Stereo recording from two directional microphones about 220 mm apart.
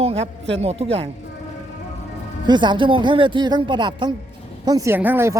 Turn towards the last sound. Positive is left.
turn(degrees=-10)  # may be behind; listen again after turning